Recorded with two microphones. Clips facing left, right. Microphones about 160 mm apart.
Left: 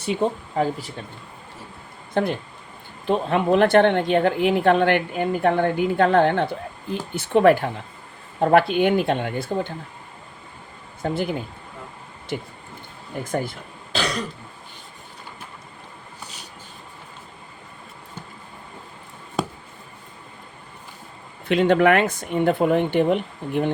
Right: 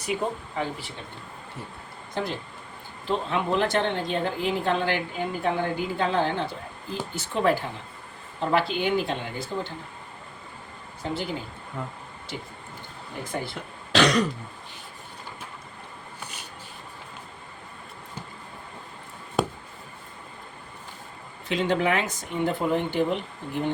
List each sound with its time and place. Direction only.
0.0 s speech: 30° left (ahead or behind)
0.5 s speech: 40° left (ahead or behind)
2.2 s a woman's voice: 55° left (ahead or behind)
11.0 s speech: 55° left (ahead or behind)
13.2 s speech: 45° left (ahead or behind)
13.9 s throat clearing: 70° right (ahead or behind)
21.4 s a woman's voice: 60° left (ahead or behind)